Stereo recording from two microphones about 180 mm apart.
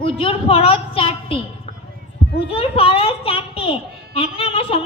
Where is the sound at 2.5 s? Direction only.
30° left (ahead or behind).